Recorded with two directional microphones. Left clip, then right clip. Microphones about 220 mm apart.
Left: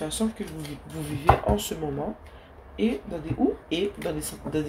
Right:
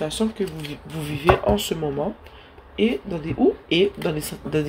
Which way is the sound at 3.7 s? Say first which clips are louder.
Right 7 dB; 45° right (ahead or behind).